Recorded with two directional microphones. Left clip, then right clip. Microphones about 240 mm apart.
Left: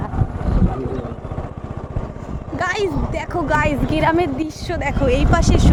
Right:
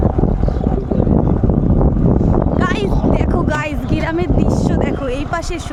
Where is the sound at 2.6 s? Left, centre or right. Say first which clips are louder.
Right 2 dB; centre.